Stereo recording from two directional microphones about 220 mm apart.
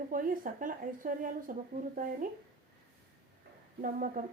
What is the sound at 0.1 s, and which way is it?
A woman's voice, 40° right (ahead or behind).